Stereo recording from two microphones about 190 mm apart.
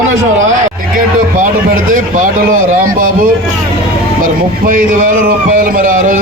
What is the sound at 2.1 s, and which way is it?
Speech, 45° right (ahead or behind).